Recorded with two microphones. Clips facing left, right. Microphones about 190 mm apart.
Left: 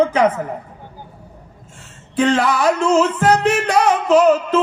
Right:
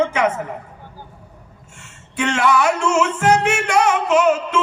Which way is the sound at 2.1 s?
35° left (ahead or behind).